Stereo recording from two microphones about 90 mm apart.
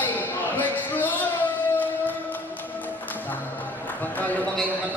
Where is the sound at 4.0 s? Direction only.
20° left (ahead or behind).